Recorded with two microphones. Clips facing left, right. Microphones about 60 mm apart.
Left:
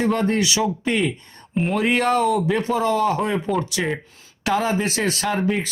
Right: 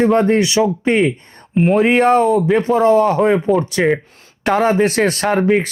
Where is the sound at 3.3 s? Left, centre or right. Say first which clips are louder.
Right 8 dB; centre.